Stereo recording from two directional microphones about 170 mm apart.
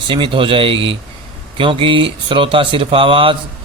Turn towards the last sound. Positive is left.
turn(degrees=-30)  # may be behind; listen again after turning